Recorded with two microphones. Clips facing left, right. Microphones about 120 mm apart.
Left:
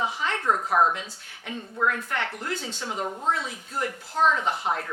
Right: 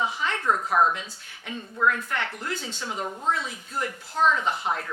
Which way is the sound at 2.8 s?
40° left (ahead or behind).